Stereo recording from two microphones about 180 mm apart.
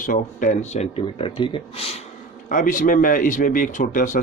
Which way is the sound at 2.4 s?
45° left (ahead or behind).